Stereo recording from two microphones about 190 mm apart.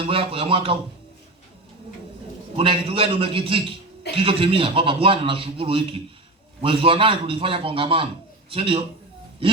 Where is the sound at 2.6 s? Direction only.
30° right (ahead or behind).